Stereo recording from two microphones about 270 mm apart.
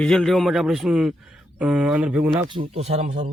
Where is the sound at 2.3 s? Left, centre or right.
Centre.